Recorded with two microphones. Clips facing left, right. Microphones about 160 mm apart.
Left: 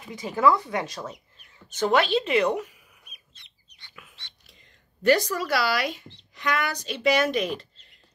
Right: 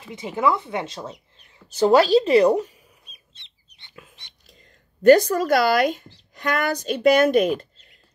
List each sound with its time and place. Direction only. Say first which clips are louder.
0.0 s speech: left 1 dB; 25° right (ahead or behind)
1.7 s bird: right 7 dB; 35° right (ahead or behind)
5.0 s a woman's voice: right 8 dB; 45° right (ahead or behind)